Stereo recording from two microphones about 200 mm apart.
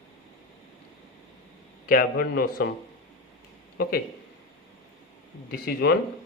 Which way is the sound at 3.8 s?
50° left (ahead or behind).